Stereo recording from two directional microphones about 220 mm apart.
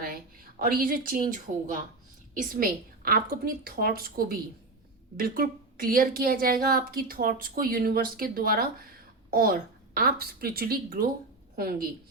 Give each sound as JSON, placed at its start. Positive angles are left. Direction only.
{"t": 0.6, "sound": "a woman's voice", "side_deg": -40}